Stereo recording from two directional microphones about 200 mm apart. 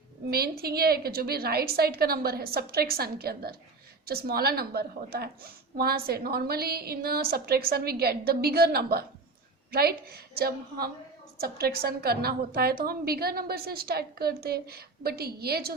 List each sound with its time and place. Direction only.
0.3 s a woman's voice: 50° right (ahead or behind)